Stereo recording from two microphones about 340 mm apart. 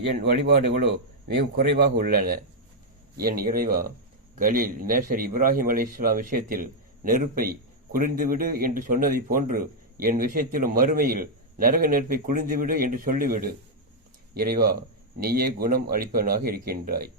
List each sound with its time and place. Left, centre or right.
0.2 s a man's voice: right